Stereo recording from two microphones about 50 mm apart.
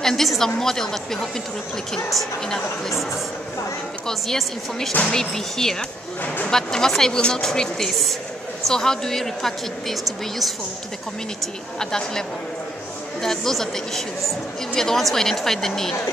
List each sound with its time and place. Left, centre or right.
0.0 s a woman's voice: centre
4.1 s speech: centre
6.2 s speech: left
6.5 s speech: centre
11.8 s speech: centre